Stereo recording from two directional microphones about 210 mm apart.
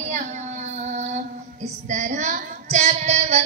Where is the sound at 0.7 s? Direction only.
35° right (ahead or behind).